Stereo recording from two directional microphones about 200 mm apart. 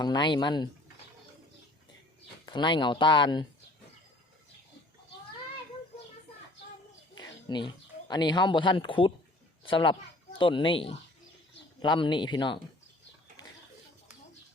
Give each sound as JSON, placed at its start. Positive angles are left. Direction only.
{"t": 0.0, "sound": "speech", "side_deg": 20}
{"t": 2.5, "sound": "speech", "side_deg": 25}
{"t": 7.2, "sound": "speech", "side_deg": 20}